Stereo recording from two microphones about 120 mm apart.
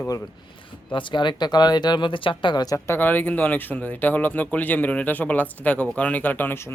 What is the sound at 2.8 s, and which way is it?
Speech, 15° left (ahead or behind).